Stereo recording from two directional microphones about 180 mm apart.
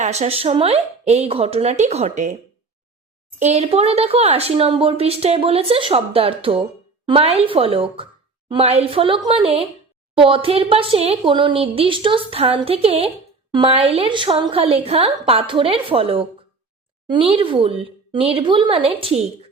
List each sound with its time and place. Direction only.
0.0 s speech: 40° right (ahead or behind)
3.3 s speech: 40° right (ahead or behind)